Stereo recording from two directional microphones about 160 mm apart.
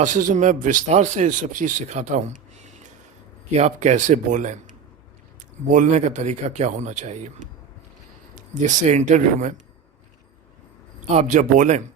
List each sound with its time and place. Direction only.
0.0 s a man's voice: 50° right (ahead or behind)
3.5 s a man's voice: 45° right (ahead or behind)
5.6 s a man's voice: 55° right (ahead or behind)
11.1 s a man's voice: 50° right (ahead or behind)